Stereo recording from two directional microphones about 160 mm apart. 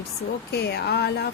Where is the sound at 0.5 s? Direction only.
90° left.